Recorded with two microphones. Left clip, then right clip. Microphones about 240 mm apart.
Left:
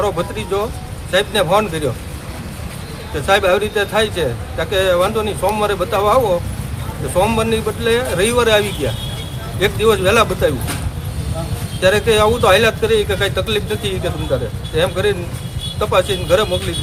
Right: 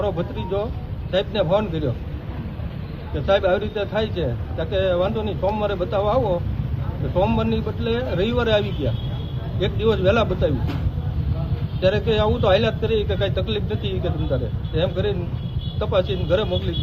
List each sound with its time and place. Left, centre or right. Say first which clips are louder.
0.0 s speech: left 6 dB; centre
3.2 s speech: left 5 dB; centre
11.8 s speech: left 7 dB; centre